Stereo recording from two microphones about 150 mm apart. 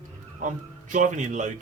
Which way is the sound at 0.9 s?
55° right (ahead or behind).